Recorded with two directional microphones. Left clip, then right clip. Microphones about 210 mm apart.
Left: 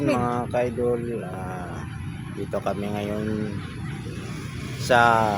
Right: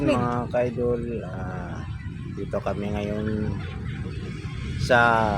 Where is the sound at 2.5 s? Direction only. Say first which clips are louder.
Left 1 dB; 5° left (ahead or behind).